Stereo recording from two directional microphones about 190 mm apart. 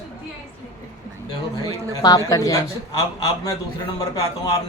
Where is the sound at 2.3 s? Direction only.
20° left (ahead or behind).